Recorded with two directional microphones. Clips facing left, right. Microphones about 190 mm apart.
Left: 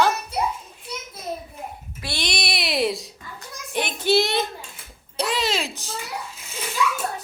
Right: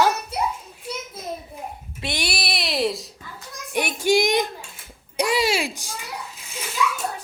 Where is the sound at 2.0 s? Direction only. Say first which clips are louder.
Right 2 dB; 20° right (ahead or behind).